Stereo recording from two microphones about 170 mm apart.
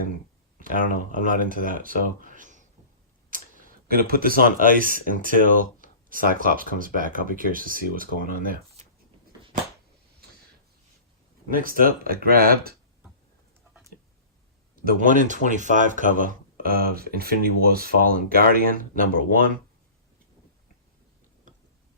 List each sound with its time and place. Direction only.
0.8 s speech: 50° left (ahead or behind)
1.2 s speech: 50° right (ahead or behind)
11.5 s speech: 55° right (ahead or behind)
14.8 s speech: 50° right (ahead or behind)